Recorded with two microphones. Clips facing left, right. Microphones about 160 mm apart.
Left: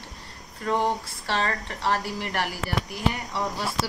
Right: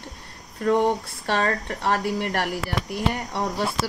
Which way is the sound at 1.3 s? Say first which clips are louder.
Right 4 dB; 55° right (ahead or behind).